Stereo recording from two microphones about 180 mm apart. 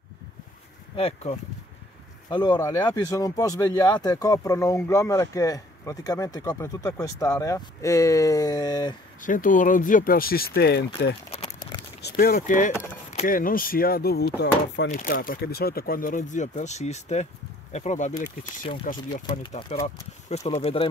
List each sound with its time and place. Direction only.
0.9 s speech: 35° left (ahead or behind)
2.2 s speech: 25° left (ahead or behind)
9.2 s speech: 45° left (ahead or behind); by 10.9 s 60° left (ahead or behind)
11.3 s a sound: 25° left (ahead or behind)
12.0 s speech: 55° left (ahead or behind)
14.9 s speech: 50° left (ahead or behind); by 20.9 s 35° left (ahead or behind)